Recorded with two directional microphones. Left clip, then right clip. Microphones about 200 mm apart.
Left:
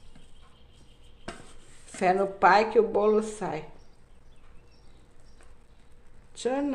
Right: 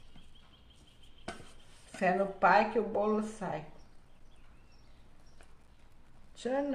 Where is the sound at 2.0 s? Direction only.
35° left (ahead or behind).